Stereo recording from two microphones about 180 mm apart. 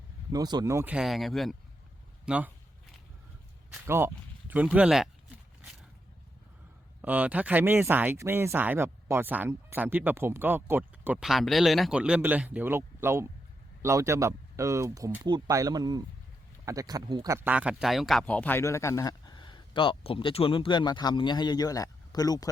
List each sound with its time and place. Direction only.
0.3 s speech: 20° right (ahead or behind)
0.9 s speech: centre (ahead or behind)
3.8 s speech: 15° right (ahead or behind)
7.0 s speech: 10° right (ahead or behind); by 22.4 s 20° left (ahead or behind)